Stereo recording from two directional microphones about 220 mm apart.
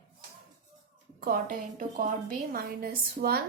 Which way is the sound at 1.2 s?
40° right (ahead or behind).